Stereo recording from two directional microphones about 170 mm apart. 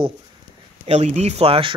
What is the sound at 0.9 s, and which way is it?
Speech, 40° right (ahead or behind).